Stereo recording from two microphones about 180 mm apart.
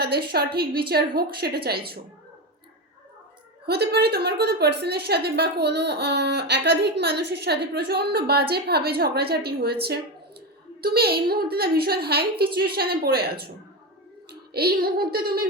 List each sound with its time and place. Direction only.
0.0 s a woman's voice: 60° right (ahead or behind)
3.7 s a woman's voice: 65° right (ahead or behind)
10.8 s a woman's voice: 60° right (ahead or behind)